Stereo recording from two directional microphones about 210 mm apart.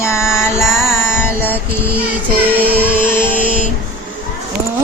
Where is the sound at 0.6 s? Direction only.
Centre (ahead or behind).